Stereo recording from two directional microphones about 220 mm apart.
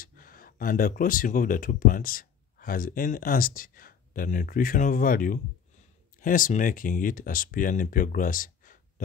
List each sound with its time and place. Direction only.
0.0 s speech: 40° left (ahead or behind)